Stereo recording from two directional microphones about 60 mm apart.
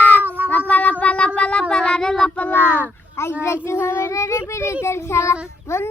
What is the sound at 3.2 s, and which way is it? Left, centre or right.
Speech, left.